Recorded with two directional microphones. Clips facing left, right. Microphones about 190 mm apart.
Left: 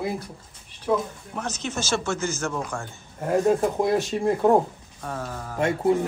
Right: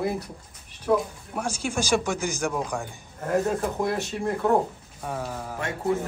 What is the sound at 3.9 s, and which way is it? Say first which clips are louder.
Speech: left 5 dB; 20° left (ahead or behind).